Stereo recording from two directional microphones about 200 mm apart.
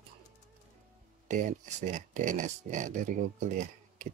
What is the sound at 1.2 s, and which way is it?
Speech, 40° right (ahead or behind).